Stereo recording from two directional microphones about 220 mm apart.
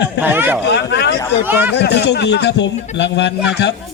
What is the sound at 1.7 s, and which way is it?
A man's voice, 50° left (ahead or behind).